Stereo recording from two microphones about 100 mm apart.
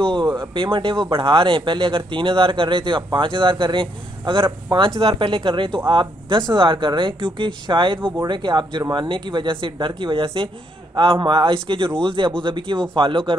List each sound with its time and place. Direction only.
0.6 s speech: 55° right (ahead or behind)